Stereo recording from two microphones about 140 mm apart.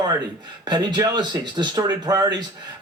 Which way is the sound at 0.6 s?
30° right (ahead or behind).